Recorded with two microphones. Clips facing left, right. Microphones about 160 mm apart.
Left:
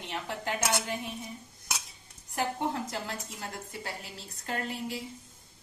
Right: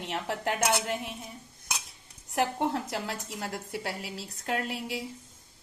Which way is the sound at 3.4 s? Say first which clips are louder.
Right 5 dB; 70° right (ahead or behind).